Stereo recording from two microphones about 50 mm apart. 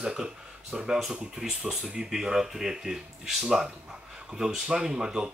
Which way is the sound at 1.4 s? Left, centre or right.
Centre.